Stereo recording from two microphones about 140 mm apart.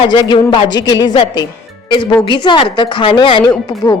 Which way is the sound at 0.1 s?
30° left (ahead or behind).